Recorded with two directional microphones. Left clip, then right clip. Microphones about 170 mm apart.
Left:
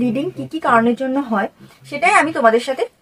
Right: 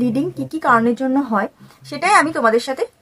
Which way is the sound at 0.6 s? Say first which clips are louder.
Even; 25° right (ahead or behind).